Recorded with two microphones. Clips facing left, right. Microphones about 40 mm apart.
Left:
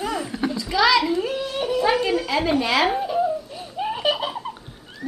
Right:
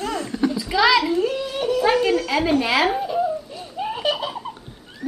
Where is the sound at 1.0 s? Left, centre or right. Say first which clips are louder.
Right 2 dB; centre.